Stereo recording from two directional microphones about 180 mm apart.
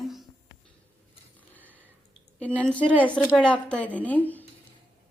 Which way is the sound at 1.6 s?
10° right (ahead or behind).